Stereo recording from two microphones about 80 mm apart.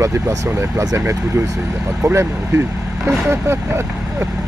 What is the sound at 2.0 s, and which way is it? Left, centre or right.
Speech, right.